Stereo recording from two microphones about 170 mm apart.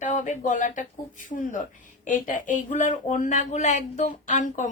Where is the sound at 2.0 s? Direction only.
50° left (ahead or behind).